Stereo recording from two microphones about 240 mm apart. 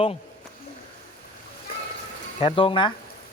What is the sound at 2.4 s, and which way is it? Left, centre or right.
Speech, left.